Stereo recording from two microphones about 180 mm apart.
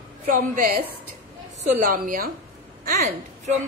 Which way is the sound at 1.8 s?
50° right (ahead or behind).